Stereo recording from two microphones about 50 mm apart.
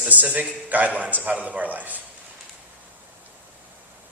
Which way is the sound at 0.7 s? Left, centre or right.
Right.